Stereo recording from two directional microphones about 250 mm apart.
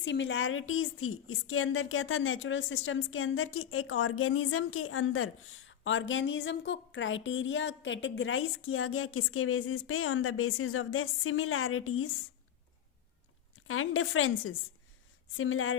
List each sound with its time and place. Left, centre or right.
0.0 s a woman's voice: left
13.7 s a woman's voice: left